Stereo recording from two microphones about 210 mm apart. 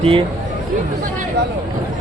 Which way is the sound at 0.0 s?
25° right (ahead or behind).